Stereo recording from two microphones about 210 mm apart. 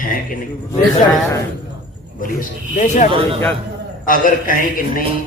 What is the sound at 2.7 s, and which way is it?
A man's voice, 35° left (ahead or behind).